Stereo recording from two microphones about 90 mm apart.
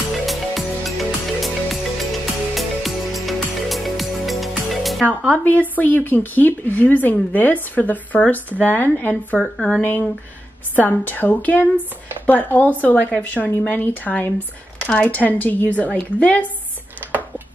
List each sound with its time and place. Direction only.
0.3 s music: centre (ahead or behind)
5.0 s speech: 20° right (ahead or behind)
5.4 s speech: 20° left (ahead or behind)